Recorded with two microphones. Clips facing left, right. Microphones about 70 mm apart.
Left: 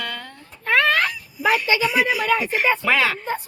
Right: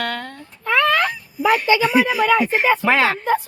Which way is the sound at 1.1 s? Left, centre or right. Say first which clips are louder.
Right 3 dB; right.